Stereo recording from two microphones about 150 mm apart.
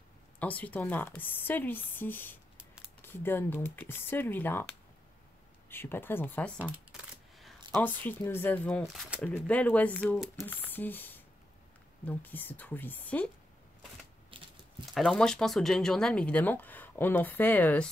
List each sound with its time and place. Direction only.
0.4 s speech: 10° left (ahead or behind)
2.5 s a sound: 5° right (ahead or behind)
3.0 s speech: 15° left (ahead or behind)
5.7 s speech: 15° left (ahead or behind)
6.6 s a sound: centre (ahead or behind)
7.7 s speech: 10° left (ahead or behind)
9.3 s speech: 10° left (ahead or behind)
10.1 s speech: centre (ahead or behind)
10.4 s speech: 10° left (ahead or behind)
14.3 s a sound: 35° right (ahead or behind)
14.9 s speech: centre (ahead or behind)